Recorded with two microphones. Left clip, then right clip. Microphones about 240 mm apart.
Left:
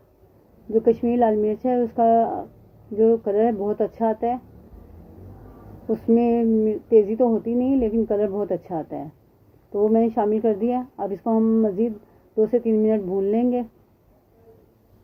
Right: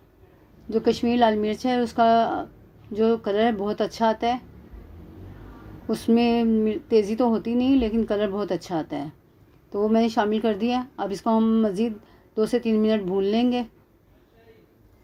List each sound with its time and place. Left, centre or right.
0.7 s a woman's voice: right
5.9 s a woman's voice: right